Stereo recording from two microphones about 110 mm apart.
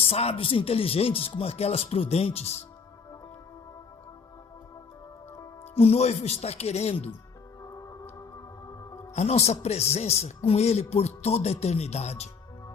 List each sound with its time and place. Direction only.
0.0 s speech: 65° left (ahead or behind)
5.7 s speech: 65° left (ahead or behind); by 6.9 s 80° left
7.6 s music: 30° left (ahead or behind)
9.1 s speech: 85° left